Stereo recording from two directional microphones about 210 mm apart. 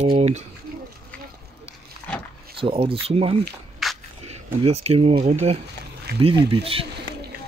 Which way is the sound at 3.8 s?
Centre (ahead or behind).